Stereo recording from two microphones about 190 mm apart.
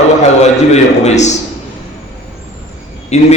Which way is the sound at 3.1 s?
35° left (ahead or behind).